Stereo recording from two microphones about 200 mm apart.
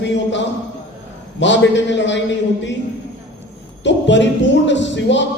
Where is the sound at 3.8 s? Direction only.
65° left (ahead or behind).